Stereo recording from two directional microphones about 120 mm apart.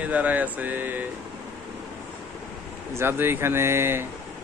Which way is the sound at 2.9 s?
20° right (ahead or behind).